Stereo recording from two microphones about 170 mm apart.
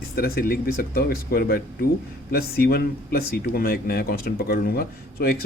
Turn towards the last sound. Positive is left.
turn(degrees=65)  # may be behind; listen again after turning